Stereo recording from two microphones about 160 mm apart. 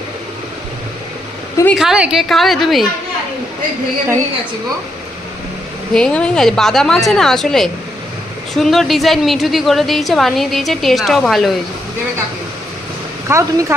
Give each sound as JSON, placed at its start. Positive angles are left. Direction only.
{"t": 1.7, "sound": "a woman's voice", "side_deg": -5}
{"t": 5.9, "sound": "a woman's voice", "side_deg": 5}
{"t": 13.2, "sound": "speech", "side_deg": -15}